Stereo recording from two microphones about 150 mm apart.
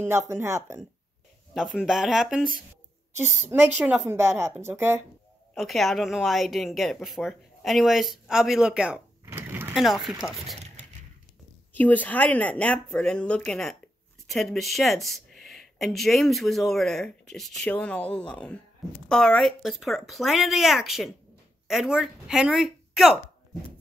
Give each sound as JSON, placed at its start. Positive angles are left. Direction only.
{"t": 0.3, "sound": "a woman's voice", "side_deg": -20}
{"t": 1.5, "sound": "a woman's voice", "side_deg": 0}
{"t": 5.5, "sound": "speech", "side_deg": 0}
{"t": 9.2, "sound": "sewing machine", "side_deg": -15}
{"t": 9.8, "sound": "speech", "side_deg": 0}
{"t": 11.7, "sound": "speech", "side_deg": 10}